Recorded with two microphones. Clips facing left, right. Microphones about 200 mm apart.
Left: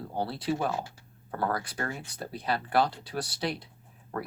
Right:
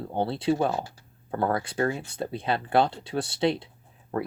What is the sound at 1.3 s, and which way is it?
Speech, 25° right (ahead or behind).